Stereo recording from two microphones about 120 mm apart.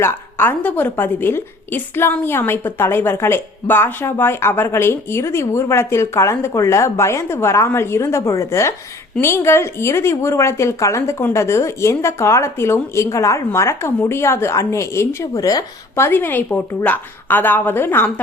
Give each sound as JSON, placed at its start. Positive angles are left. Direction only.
{"t": 0.0, "sound": "a woman's voice", "side_deg": 15}